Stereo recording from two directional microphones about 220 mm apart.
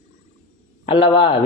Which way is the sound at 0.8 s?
20° left (ahead or behind).